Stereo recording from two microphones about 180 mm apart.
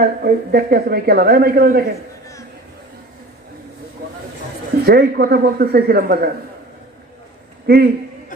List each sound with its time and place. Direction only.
0.0 s a woman's voice: 60° right (ahead or behind)
4.8 s a woman's voice: 60° right (ahead or behind)
7.6 s a man's voice: 60° right (ahead or behind)